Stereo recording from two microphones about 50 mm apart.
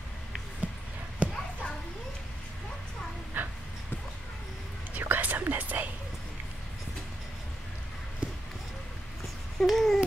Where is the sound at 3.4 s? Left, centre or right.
Right.